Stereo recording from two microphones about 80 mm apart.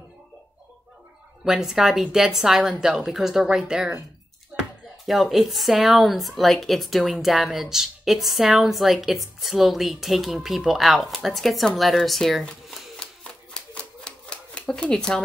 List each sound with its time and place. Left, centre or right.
1.4 s a woman's voice: centre
4.5 s a sound: centre
5.0 s a woman's voice: centre
13.0 s typewriter: centre